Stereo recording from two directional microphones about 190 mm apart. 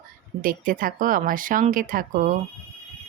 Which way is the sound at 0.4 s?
45° right (ahead or behind).